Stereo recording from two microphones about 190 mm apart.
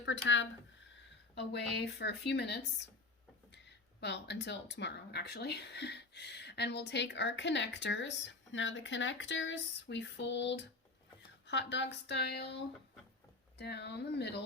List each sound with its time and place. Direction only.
0.1 s speech: 85° left
1.4 s speech: 60° left (ahead or behind)
4.0 s speech: 65° left (ahead or behind)
13.6 s speech: 60° left (ahead or behind)